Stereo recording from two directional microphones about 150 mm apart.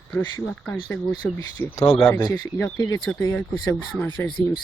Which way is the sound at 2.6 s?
20° left (ahead or behind).